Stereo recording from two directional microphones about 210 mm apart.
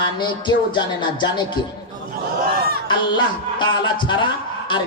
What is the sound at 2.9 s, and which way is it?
A man's voice, 20° left (ahead or behind).